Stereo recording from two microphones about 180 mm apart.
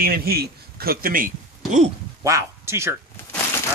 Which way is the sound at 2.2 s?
15° right (ahead or behind).